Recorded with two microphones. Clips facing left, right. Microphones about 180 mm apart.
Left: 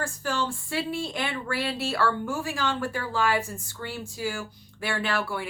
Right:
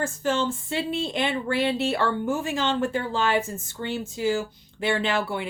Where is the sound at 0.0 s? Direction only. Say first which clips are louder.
Right 4 dB; 20° right (ahead or behind).